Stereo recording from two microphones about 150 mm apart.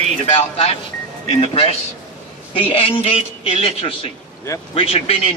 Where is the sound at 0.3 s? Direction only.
40° left (ahead or behind).